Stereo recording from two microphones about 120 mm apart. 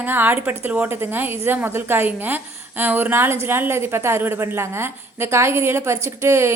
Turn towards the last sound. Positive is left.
turn(degrees=-20)  # may be behind; listen again after turning